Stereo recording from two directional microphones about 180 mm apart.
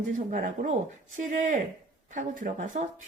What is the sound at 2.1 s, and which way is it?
Speech, 45° right (ahead or behind).